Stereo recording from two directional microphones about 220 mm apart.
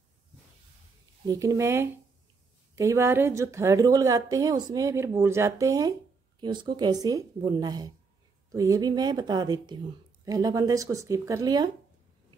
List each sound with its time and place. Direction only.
1.2 s a woman's voice: 15° right (ahead or behind)